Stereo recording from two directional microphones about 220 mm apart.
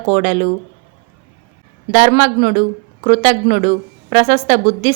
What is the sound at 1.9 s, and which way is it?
Speech, 30° right (ahead or behind).